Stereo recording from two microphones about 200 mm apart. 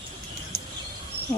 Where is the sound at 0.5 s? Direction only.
50° right (ahead or behind).